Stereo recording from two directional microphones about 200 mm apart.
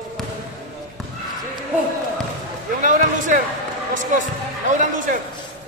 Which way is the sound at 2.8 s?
40° right (ahead or behind).